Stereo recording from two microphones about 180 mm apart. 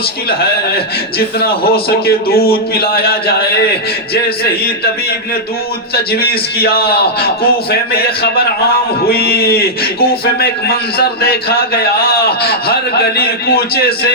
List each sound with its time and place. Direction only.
1.4 s a man's voice: 55° left (ahead or behind)
5.9 s a man's voice: 60° left (ahead or behind)